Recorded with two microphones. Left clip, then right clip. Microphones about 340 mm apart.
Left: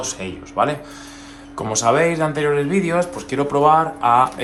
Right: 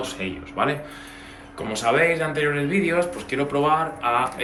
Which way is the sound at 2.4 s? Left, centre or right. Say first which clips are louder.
Left 4 dB; centre.